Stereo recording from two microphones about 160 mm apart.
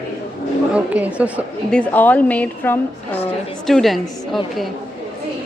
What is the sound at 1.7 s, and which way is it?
A woman's voice, 10° left (ahead or behind).